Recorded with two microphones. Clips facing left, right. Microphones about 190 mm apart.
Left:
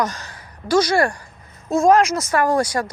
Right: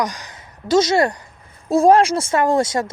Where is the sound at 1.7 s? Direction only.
30° right (ahead or behind).